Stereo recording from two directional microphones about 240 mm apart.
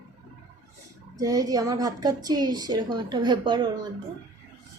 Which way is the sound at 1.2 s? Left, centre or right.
Centre.